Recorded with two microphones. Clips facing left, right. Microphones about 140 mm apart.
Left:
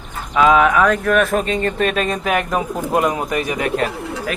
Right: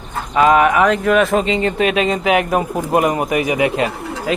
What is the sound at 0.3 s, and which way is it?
Speech, centre (ahead or behind).